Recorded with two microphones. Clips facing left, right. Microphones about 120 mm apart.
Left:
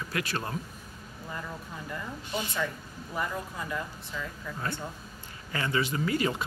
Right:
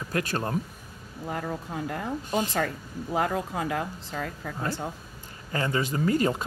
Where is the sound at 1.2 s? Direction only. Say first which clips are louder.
Right 7 dB; 75° right (ahead or behind).